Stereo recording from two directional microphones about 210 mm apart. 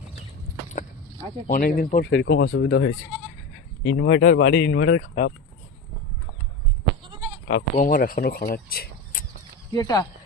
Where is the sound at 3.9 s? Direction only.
45° left (ahead or behind).